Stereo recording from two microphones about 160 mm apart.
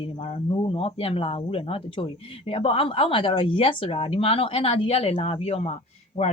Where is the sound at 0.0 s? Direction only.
35° left (ahead or behind).